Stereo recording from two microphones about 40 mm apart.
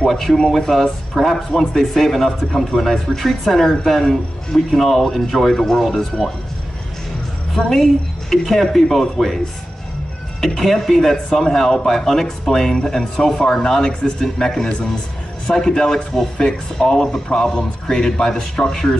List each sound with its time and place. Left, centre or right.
0.1 s speech: centre
7.5 s a woman's voice: centre
10.6 s speech: centre